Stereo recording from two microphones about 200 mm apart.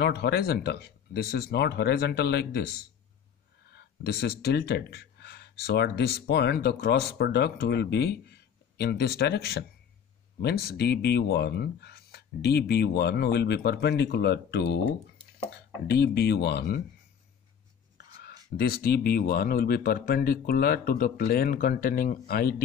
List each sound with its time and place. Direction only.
0.0 s speech: 55° left (ahead or behind)
3.7 s speech: 55° left (ahead or behind)
15.9 s speech: 55° left (ahead or behind)
18.6 s speech: 50° left (ahead or behind)